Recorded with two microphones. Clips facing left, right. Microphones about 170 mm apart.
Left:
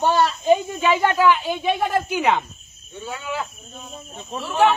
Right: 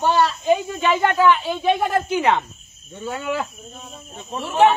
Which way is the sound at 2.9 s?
55° right (ahead or behind).